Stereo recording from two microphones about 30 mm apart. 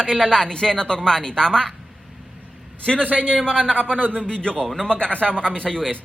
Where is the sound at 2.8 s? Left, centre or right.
Left.